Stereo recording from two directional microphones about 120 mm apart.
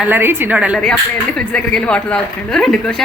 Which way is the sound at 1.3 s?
5° left (ahead or behind).